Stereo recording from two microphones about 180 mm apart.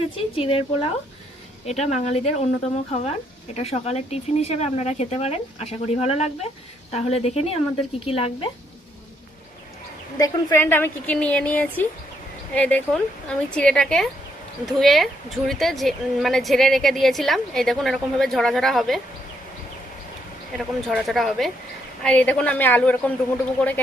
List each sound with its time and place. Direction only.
0.3 s speech: 30° left (ahead or behind)
10.2 s a woman's voice: 15° left (ahead or behind); by 18.9 s centre (ahead or behind)
20.5 s a woman's voice: centre (ahead or behind)